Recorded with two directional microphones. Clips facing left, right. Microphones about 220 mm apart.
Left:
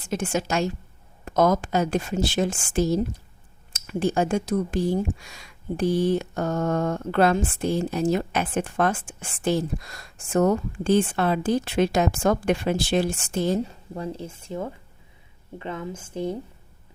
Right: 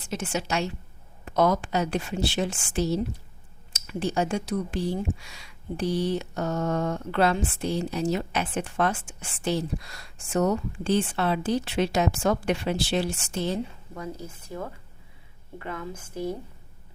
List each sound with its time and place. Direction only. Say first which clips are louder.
0.1 s speech: left 4 dB; 50° left (ahead or behind)
13.9 s speech: left 7 dB; 30° left (ahead or behind)